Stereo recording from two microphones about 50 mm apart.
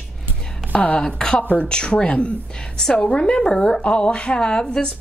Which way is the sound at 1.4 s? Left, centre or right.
Left.